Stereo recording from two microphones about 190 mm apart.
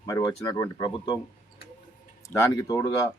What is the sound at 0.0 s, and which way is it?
Speech, 20° left (ahead or behind).